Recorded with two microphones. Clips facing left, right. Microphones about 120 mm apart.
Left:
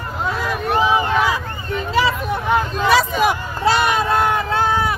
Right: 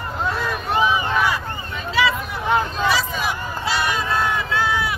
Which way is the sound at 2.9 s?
60° left (ahead or behind).